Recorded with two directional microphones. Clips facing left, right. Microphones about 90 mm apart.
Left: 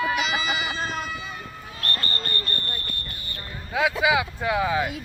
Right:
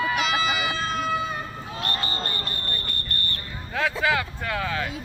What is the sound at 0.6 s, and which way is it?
Vehicle, 50° right (ahead or behind).